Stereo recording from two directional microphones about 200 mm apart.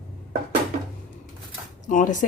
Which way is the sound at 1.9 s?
40° left (ahead or behind).